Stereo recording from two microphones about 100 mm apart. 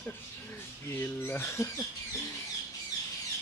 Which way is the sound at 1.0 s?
20° left (ahead or behind).